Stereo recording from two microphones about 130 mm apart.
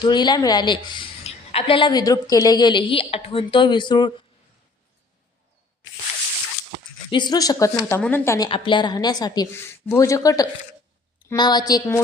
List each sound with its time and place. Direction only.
0.0 s a woman's voice: 35° left (ahead or behind)
7.1 s a woman's voice: 35° left (ahead or behind)
8.4 s a woman's voice: 40° left (ahead or behind); by 12.0 s 25° left (ahead or behind)